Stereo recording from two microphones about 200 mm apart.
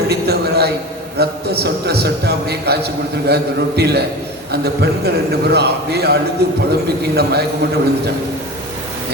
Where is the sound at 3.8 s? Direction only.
55° right (ahead or behind).